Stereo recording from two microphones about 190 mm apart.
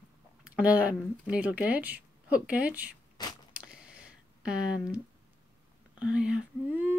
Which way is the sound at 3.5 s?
5° right (ahead or behind).